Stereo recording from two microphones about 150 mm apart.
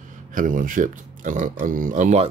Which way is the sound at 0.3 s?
60° right (ahead or behind).